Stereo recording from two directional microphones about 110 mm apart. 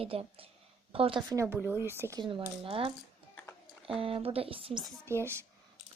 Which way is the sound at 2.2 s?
50° right (ahead or behind).